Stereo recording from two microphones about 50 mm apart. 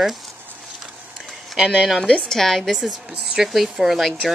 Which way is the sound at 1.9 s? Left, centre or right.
Centre.